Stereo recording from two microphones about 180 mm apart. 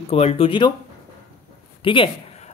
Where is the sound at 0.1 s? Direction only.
35° left (ahead or behind).